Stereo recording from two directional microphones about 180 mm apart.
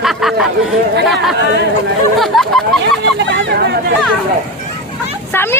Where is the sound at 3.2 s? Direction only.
75° right (ahead or behind).